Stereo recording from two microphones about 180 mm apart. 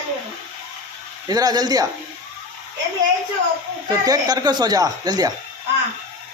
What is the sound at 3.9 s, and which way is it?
A woman's voice, 20° right (ahead or behind).